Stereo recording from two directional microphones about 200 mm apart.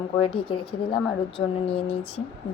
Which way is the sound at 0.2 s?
25° left (ahead or behind).